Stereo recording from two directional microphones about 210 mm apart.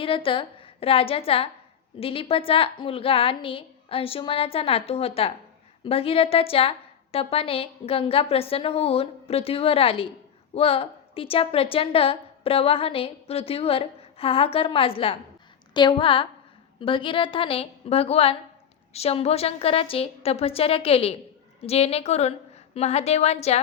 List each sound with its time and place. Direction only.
0.0 s a woman's voice: 25° left (ahead or behind)